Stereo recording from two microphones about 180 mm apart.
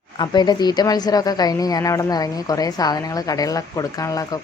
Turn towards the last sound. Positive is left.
turn(degrees=20)  # may be behind; listen again after turning